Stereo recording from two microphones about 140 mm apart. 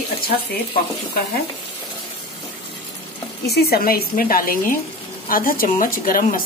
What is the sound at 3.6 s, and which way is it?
Speech, 90° left.